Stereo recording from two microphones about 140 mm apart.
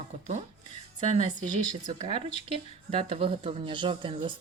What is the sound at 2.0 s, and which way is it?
Speech, 40° right (ahead or behind).